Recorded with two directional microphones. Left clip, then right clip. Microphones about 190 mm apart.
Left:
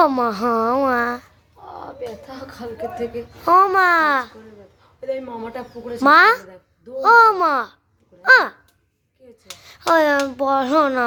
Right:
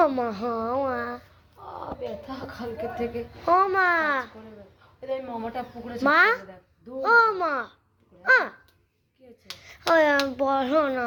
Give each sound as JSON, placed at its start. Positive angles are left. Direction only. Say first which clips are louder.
{"t": 0.1, "sound": "a child's voice", "louder": "left 8 dB", "side_deg": 30}
{"t": 0.6, "sound": "a child's voice", "louder": "left 8 dB", "side_deg": 40}
{"t": 1.6, "sound": "a sound", "louder": "left 3 dB", "side_deg": 20}
{"t": 2.2, "sound": "a child's voice", "louder": "left 2 dB", "side_deg": 15}
{"t": 3.4, "sound": "a child's voice", "louder": "left 7 dB", "side_deg": 30}
{"t": 6.0, "sound": "a child's voice", "louder": "left 8 dB", "side_deg": 25}
{"t": 9.6, "sound": "a child's voice", "louder": "left 4 dB", "side_deg": 15}